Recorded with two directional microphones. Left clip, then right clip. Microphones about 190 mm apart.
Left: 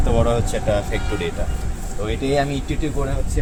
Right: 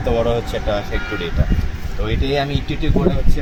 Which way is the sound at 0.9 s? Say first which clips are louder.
Right 1 dB; 65° left (ahead or behind).